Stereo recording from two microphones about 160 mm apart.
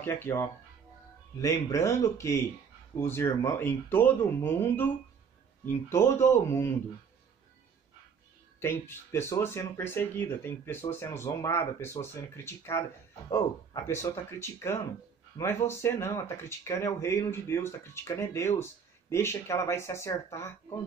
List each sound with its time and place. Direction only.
0.0 s speech: 15° left (ahead or behind)
8.5 s speech: 15° left (ahead or behind)
13.8 s speech: 15° left (ahead or behind)